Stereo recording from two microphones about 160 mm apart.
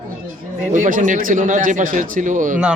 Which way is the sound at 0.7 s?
55° right (ahead or behind).